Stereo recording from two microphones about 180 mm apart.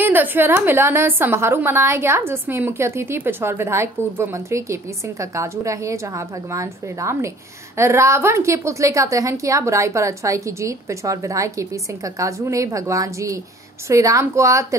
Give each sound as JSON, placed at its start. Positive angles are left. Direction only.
{"t": 0.0, "sound": "a woman's voice", "side_deg": -10}